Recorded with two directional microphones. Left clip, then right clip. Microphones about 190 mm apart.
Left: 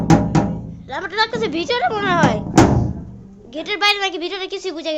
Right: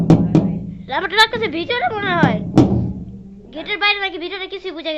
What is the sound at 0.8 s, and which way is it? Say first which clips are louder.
A woman's voice: right 6 dB; 5° right (ahead or behind).